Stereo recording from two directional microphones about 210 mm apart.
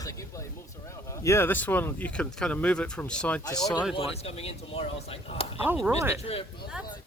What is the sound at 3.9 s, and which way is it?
Speech, 30° left (ahead or behind).